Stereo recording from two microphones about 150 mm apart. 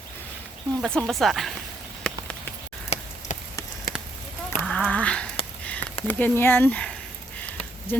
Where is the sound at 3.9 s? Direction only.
75° left (ahead or behind).